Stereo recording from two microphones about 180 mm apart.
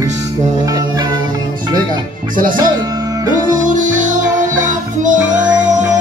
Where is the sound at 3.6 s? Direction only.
45° right (ahead or behind).